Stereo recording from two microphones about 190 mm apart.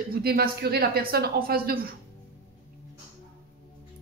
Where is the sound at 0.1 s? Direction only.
55° right (ahead or behind).